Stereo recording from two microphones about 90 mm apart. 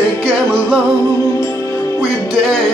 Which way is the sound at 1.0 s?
35° left (ahead or behind).